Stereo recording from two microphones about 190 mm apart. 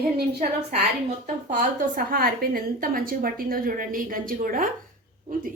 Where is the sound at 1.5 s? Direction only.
50° right (ahead or behind).